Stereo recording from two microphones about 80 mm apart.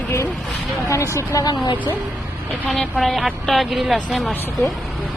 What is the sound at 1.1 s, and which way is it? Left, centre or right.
Speech, left.